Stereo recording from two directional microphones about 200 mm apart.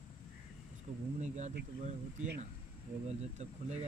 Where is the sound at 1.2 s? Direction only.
35° right (ahead or behind).